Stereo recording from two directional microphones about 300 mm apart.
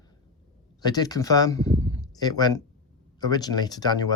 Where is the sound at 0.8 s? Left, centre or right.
Centre.